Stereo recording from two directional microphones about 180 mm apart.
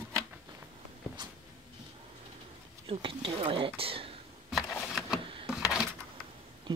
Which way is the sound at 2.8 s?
30° right (ahead or behind).